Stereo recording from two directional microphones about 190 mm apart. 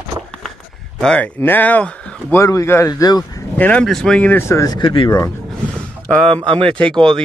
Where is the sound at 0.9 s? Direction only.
5° left (ahead or behind).